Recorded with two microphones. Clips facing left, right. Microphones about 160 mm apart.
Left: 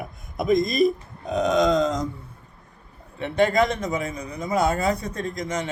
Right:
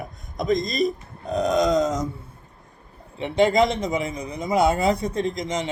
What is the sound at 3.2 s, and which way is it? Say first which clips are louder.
A man's voice: right 2 dB; 15° right (ahead or behind).